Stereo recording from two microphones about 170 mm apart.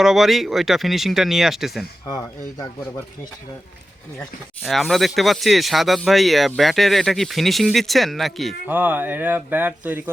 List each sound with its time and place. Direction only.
0.0 s speech: centre (ahead or behind)
2.0 s speech: 25° left (ahead or behind)
4.2 s speech: centre (ahead or behind)
8.6 s speech: 10° right (ahead or behind)